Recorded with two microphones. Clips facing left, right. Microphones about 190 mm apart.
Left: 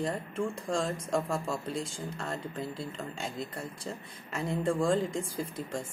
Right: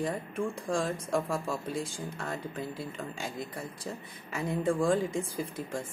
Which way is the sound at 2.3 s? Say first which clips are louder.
Even; 5° right (ahead or behind).